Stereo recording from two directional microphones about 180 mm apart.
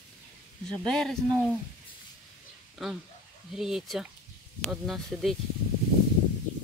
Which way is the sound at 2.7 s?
5° right (ahead or behind).